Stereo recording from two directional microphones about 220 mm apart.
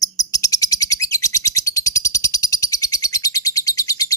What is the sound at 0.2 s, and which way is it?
Bird, 15° left (ahead or behind).